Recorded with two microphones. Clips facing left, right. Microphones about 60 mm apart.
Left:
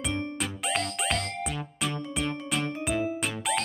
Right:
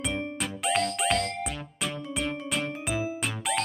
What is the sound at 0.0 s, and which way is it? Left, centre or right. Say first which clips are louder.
Music: even; centre.